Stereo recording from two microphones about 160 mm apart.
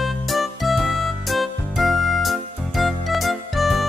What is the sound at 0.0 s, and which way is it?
Music, centre (ahead or behind).